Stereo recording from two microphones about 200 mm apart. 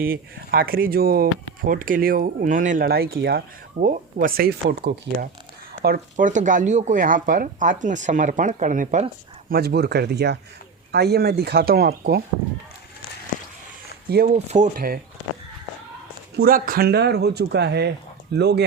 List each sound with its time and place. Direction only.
0.0 s speech: 50° right (ahead or behind)
9.5 s speech: 50° right (ahead or behind)
14.3 s speech: 35° right (ahead or behind)
16.4 s speech: 45° right (ahead or behind)